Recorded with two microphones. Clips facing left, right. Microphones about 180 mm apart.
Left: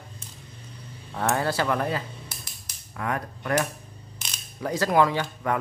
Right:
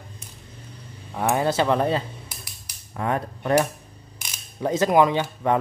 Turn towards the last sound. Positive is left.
turn(degrees=-25)  # may be behind; listen again after turning